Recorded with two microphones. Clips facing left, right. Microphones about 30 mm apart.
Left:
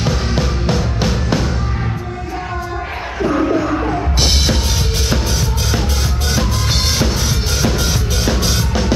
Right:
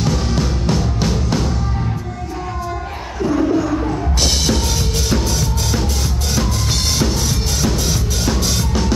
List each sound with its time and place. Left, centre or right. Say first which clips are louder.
0.0 s music: left 1 dB; left
3.2 s bird: left 1 dB; left
5.1 s music: even; centre
7.0 s music: left 1 dB; centre